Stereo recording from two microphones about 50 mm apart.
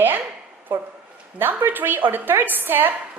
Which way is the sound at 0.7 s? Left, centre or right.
Right.